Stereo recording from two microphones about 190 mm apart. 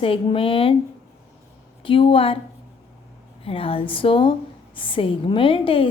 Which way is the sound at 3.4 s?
30° left (ahead or behind).